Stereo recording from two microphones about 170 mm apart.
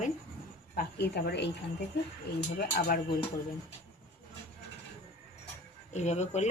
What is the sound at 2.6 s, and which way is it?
Speech, 65° left (ahead or behind).